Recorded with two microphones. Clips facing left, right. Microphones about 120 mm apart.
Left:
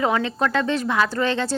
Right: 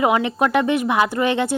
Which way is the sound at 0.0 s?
15° right (ahead or behind).